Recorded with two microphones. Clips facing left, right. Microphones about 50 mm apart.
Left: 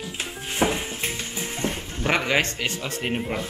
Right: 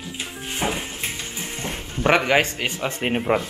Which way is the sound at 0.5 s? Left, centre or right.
Centre.